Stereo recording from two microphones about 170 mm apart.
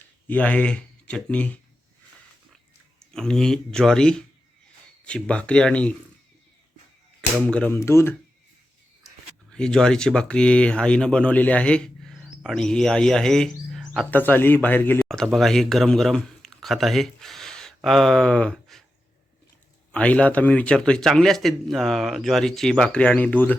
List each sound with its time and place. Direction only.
0.3 s speech: 10° left (ahead or behind)
3.0 s a man's voice: 5° left (ahead or behind)
7.4 s speech: 5° left (ahead or behind)
9.5 s speech: 5° left (ahead or behind)
19.9 s a man's voice: 5° left (ahead or behind)